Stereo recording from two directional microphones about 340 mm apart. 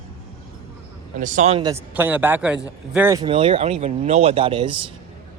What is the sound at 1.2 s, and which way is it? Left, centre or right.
A man's voice, right.